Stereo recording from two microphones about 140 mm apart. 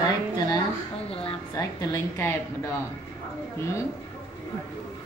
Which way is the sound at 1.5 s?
20° left (ahead or behind).